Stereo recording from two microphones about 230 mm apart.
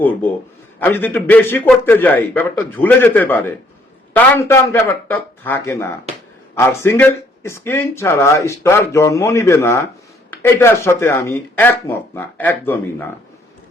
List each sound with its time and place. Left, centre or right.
0.0 s speech: centre